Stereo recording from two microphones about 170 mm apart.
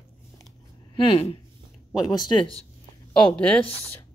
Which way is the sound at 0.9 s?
35° left (ahead or behind).